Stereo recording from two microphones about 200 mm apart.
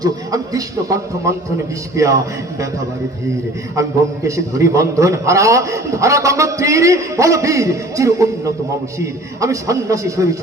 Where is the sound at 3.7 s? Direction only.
15° right (ahead or behind).